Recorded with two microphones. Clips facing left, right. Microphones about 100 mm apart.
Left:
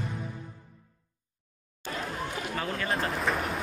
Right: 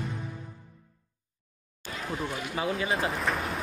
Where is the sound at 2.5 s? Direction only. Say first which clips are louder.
Right 3 dB; 10° right (ahead or behind).